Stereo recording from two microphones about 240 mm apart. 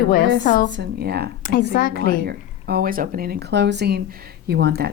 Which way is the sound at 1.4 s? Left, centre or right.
Left.